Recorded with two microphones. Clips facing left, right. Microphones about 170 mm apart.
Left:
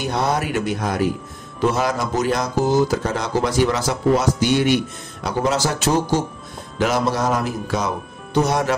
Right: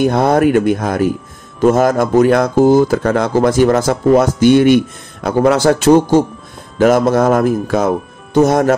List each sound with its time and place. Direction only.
0.0 s speech: 50° right (ahead or behind)